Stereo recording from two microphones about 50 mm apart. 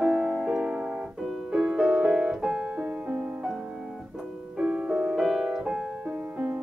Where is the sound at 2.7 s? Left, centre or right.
Right.